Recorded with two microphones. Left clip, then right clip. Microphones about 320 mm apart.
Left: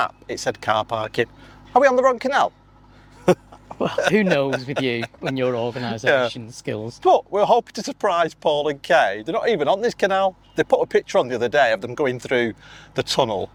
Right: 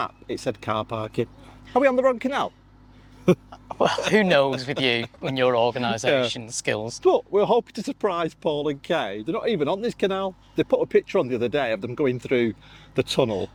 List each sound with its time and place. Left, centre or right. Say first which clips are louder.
0.0 s speech: left 5 dB; left
3.5 s a sound: right 2 dB; right
4.1 s speech: right 1 dB; right
7.3 s speech: left 3 dB; left